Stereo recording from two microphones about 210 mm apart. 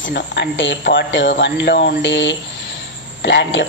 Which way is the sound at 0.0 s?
55° left (ahead or behind).